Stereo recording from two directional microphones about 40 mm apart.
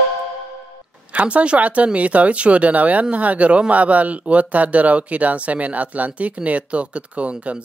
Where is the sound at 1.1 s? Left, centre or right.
Right.